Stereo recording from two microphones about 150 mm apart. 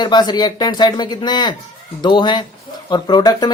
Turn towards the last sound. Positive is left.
turn(degrees=25)  # may be behind; listen again after turning